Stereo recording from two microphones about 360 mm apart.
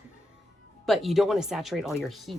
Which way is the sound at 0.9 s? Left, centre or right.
Centre.